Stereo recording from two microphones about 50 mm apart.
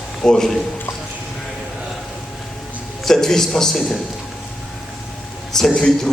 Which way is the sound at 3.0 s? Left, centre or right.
Centre.